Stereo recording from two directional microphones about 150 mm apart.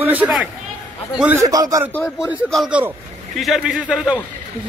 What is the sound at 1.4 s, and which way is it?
Speech, 20° right (ahead or behind).